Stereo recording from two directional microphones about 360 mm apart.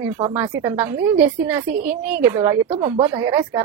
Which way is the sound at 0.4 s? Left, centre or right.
Centre.